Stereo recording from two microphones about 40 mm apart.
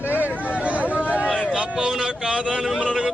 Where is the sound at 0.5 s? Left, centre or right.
Right.